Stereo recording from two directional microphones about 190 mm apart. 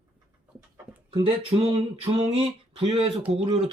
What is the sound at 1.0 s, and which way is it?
Speech, 30° right (ahead or behind).